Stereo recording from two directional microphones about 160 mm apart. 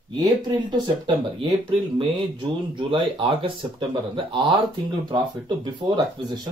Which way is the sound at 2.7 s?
30° right (ahead or behind).